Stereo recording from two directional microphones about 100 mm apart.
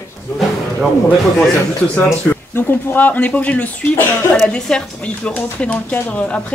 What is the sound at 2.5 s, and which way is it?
Speech, 20° left (ahead or behind).